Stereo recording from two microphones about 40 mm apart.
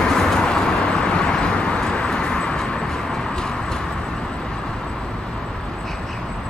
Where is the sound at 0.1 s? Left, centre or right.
Centre.